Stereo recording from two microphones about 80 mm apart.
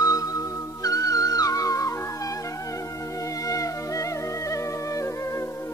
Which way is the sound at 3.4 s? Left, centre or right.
Left.